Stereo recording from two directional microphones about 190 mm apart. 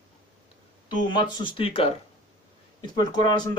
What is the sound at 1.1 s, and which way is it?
Speech, 25° left (ahead or behind).